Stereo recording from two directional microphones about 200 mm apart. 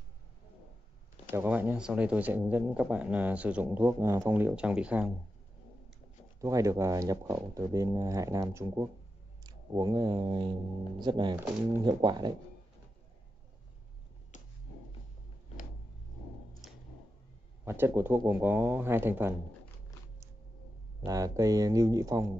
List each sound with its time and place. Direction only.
1.3 s speech: 10° right (ahead or behind)
6.4 s speech: 15° right (ahead or behind)
14.3 s finger snapping: 40° left (ahead or behind)
17.6 s speech: 10° right (ahead or behind)
21.0 s speech: 15° right (ahead or behind)